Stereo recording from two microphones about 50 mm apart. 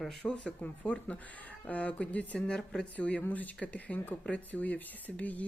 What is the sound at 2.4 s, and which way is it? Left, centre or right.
Speech, centre.